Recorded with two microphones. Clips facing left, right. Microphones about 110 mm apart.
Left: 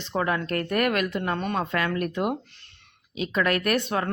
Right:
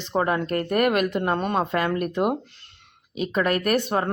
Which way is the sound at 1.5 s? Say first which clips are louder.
Right 4 dB; 25° right (ahead or behind).